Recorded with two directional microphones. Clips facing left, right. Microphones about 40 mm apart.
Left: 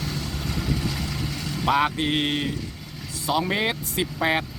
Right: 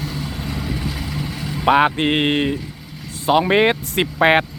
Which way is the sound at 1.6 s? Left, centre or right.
Right.